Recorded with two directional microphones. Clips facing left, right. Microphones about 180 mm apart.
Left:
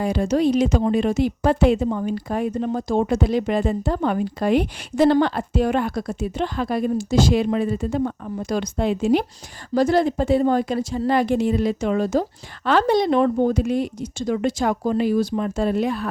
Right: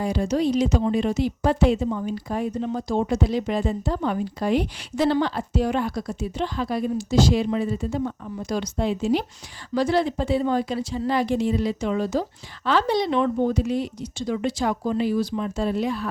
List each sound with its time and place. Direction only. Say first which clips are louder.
0.0 s a woman's voice: left 3 dB; 55° left (ahead or behind)
9.7 s speech: left 4 dB; 45° left (ahead or behind)